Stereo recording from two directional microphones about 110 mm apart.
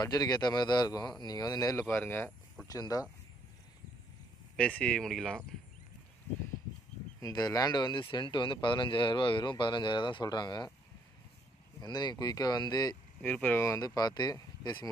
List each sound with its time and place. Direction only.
0.0 s speech: 35° left (ahead or behind)
1.8 s speech: 20° left (ahead or behind)
2.7 s speech: 35° left (ahead or behind)
4.6 s speech: 10° left (ahead or behind)
7.2 s speech: 35° left (ahead or behind)
11.8 s speech: 40° left (ahead or behind)
13.2 s speech: 15° left (ahead or behind)
13.6 s speech: 30° left (ahead or behind)